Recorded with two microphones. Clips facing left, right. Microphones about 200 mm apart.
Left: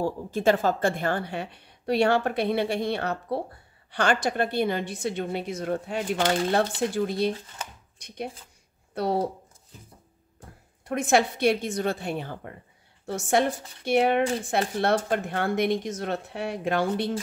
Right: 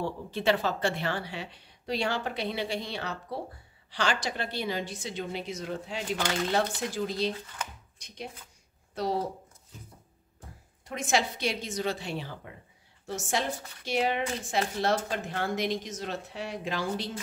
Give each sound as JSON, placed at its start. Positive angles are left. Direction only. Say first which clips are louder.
{"t": 0.0, "sound": "speech", "louder": "left 5 dB", "side_deg": 45}
{"t": 8.9, "sound": "speech", "louder": "left 4 dB", "side_deg": 60}
{"t": 10.9, "sound": "a woman's voice", "louder": "left 6 dB", "side_deg": 55}